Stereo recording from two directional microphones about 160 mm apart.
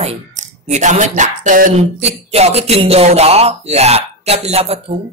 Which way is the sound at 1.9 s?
40° right (ahead or behind).